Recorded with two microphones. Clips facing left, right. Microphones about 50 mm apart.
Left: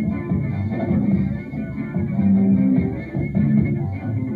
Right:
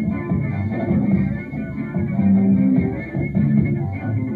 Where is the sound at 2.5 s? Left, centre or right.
Centre.